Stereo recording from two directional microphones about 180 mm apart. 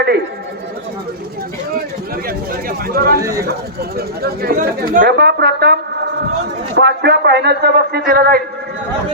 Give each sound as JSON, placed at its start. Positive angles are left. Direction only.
{"t": 2.2, "sound": "speech", "side_deg": -55}
{"t": 6.7, "sound": "speech", "side_deg": -65}